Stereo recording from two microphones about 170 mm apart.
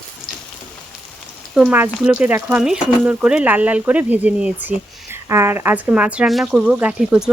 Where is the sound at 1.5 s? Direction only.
5° right (ahead or behind).